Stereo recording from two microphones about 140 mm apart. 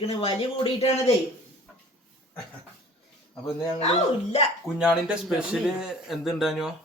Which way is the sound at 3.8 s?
50° left (ahead or behind).